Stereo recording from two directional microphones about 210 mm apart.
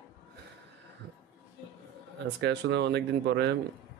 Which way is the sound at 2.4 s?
55° right (ahead or behind).